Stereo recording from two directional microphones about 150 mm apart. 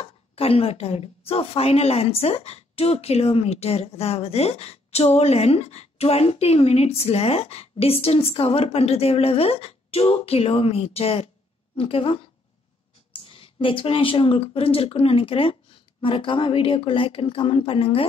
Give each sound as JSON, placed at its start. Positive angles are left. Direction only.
{"t": 0.0, "sound": "a woman's voice", "side_deg": 40}